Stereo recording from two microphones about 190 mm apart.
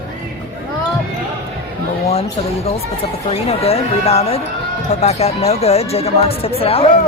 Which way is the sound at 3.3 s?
30° left (ahead or behind).